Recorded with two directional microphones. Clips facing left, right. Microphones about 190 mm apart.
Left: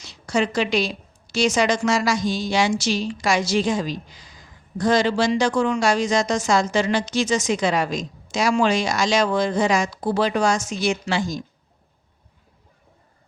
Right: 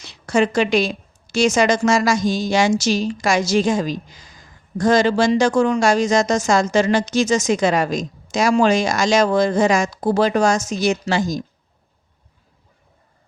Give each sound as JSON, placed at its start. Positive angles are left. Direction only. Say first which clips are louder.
{"t": 0.0, "sound": "a woman's voice", "louder": "right 4 dB", "side_deg": -55}